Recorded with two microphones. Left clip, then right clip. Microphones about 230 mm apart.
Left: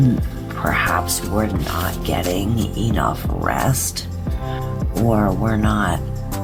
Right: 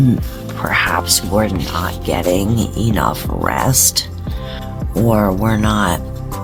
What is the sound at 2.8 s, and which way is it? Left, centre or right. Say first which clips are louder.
Speech: right 3 dB; right.